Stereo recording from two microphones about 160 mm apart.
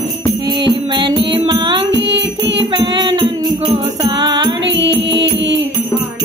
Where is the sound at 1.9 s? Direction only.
90° right.